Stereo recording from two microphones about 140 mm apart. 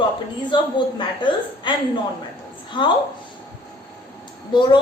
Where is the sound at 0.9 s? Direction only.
35° left (ahead or behind).